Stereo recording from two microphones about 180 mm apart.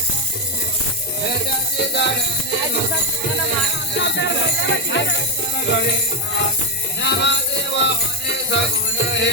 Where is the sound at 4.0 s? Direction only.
80° left.